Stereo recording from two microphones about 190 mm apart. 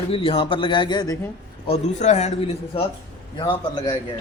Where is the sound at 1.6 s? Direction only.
35° left (ahead or behind).